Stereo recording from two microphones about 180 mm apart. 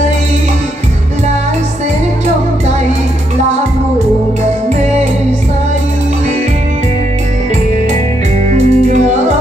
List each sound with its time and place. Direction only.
8.5 s music: 40° right (ahead or behind)